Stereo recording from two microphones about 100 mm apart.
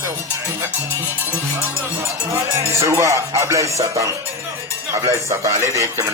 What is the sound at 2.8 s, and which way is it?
Music, 30° right (ahead or behind).